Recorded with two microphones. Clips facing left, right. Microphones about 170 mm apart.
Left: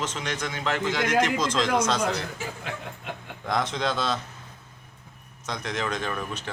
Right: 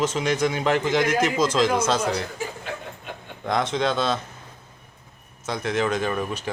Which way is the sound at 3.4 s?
Centre (ahead or behind).